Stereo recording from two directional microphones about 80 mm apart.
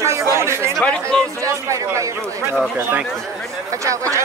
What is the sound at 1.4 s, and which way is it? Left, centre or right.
Speech, right.